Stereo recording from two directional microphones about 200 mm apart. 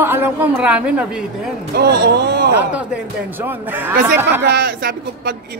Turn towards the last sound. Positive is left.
turn(degrees=-50)  # may be behind; listen again after turning